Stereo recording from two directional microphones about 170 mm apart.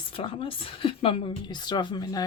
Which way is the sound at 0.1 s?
30° left (ahead or behind).